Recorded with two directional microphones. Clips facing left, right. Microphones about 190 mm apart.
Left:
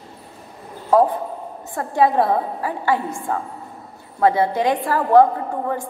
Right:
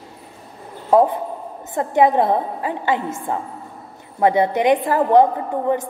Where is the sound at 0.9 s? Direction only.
20° right (ahead or behind).